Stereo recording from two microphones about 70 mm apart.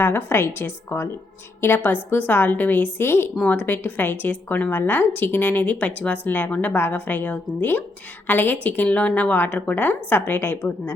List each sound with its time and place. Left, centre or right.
0.0 s a woman's voice: left